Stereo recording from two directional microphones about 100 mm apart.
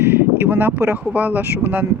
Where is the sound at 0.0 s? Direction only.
20° right (ahead or behind).